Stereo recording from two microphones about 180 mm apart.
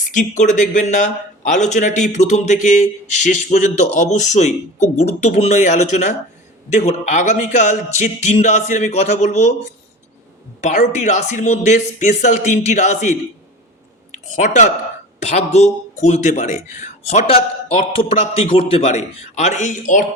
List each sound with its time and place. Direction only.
0.1 s a man's voice: 45° left (ahead or behind)
10.6 s a man's voice: 40° left (ahead or behind)